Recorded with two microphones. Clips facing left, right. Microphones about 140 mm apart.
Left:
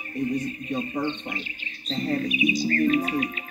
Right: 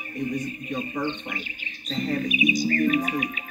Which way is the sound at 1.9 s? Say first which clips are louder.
Even; 30° left (ahead or behind).